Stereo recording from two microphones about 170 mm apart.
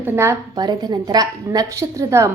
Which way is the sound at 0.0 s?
15° right (ahead or behind).